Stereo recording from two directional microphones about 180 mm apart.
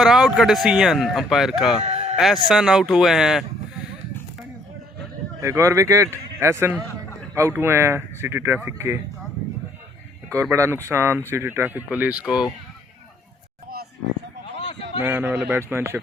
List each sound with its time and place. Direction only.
0.0 s speech: 5° right (ahead or behind)
1.8 s a sound: 35° right (ahead or behind)
2.1 s speech: centre (ahead or behind)
5.4 s a man's voice: 15° right (ahead or behind)
10.5 s a man's voice: 15° right (ahead or behind)
15.0 s a man's voice: 10° right (ahead or behind)